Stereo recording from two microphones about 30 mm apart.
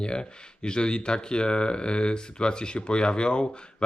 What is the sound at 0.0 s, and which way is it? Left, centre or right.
Speech, left.